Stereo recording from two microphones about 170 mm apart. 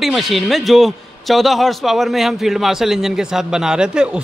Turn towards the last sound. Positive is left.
turn(degrees=-5)  # may be behind; listen again after turning